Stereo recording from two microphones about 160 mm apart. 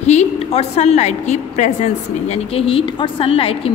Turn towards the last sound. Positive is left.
turn(degrees=35)  # may be behind; listen again after turning